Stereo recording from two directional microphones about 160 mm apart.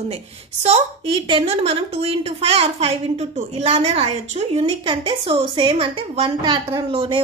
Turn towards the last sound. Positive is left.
turn(degrees=-35)  # may be behind; listen again after turning